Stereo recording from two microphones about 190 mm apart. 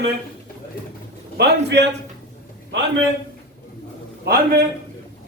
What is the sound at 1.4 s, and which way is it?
Speech, 60° right (ahead or behind).